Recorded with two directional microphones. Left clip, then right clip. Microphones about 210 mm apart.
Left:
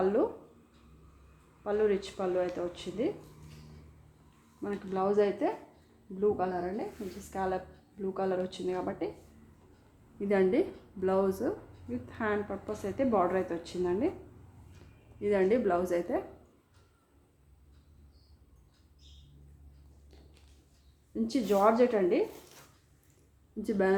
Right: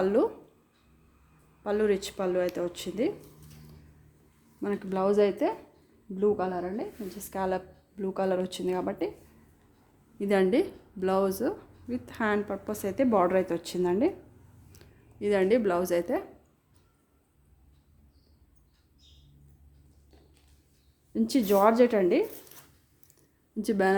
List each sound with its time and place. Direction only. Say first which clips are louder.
0.0 s a sound: right 3 dB; 50° right (ahead or behind)
1.6 s speech: right 2 dB; 50° right (ahead or behind)
4.6 s speech: right 4 dB; 55° right (ahead or behind)
10.2 s speech: right 3 dB; 45° right (ahead or behind)
14.8 s a sound: right 5 dB; 50° right (ahead or behind)
15.2 s speech: right 3 dB; 45° right (ahead or behind)
21.1 s speech: right 4 dB; 55° right (ahead or behind)
23.6 s speech: right 3 dB; 45° right (ahead or behind)